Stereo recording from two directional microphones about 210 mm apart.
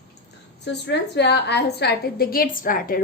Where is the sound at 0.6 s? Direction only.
55° left (ahead or behind).